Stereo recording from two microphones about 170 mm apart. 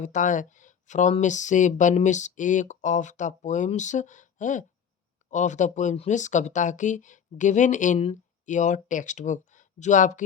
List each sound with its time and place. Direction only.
0.0 s speech: 50° left (ahead or behind)